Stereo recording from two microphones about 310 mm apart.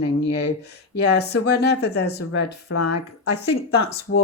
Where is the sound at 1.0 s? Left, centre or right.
Left.